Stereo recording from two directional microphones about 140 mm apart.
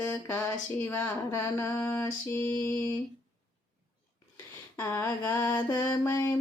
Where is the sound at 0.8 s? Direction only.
15° left (ahead or behind).